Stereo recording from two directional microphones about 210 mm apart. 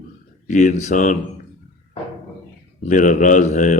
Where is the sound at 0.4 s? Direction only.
35° left (ahead or behind).